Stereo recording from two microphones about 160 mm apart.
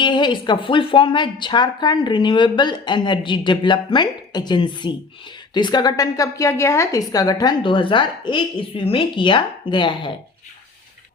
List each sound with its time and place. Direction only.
0.0 s speech: 30° left (ahead or behind)